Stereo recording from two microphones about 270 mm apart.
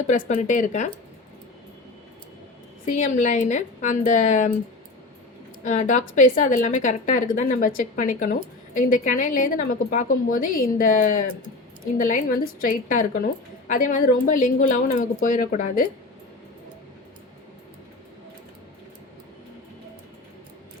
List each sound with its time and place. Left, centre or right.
0.3 s a woman's voice: left
2.8 s a woman's voice: left
5.6 s a woman's voice: left